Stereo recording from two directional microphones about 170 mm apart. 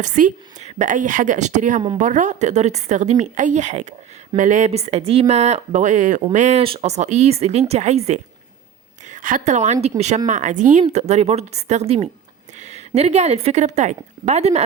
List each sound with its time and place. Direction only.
0.0 s a woman's voice: 50° right (ahead or behind)